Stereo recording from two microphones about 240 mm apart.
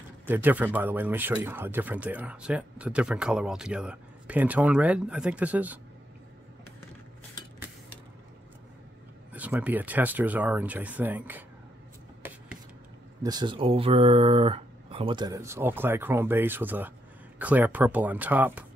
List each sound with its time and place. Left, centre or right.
0.3 s speech: centre
9.3 s speech: centre
13.2 s speech: centre